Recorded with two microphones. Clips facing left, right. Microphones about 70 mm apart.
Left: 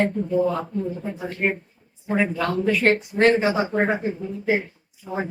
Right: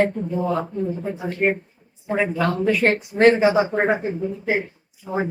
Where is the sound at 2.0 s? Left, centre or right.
Centre.